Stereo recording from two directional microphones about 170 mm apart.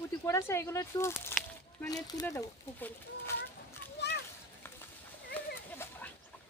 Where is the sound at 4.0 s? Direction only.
75° left (ahead or behind).